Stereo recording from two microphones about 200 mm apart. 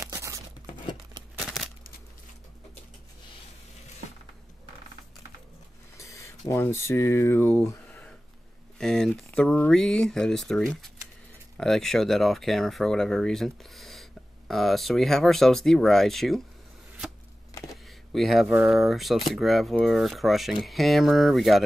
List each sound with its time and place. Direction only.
0.0 s tearing: 15° right (ahead or behind)
5.9 s speech: 15° left (ahead or behind)
17.8 s speech: centre (ahead or behind)